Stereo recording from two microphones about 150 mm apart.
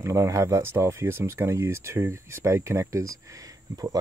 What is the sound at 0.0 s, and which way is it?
Speech, 20° right (ahead or behind).